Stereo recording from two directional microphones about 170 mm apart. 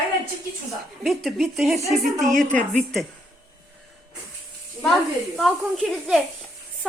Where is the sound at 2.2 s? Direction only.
45° right (ahead or behind).